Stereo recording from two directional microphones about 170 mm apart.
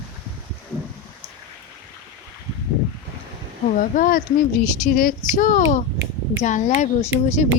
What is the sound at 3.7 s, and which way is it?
Speech, 50° left (ahead or behind).